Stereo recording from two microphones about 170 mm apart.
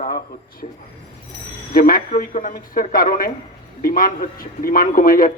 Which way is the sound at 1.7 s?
55° left (ahead or behind).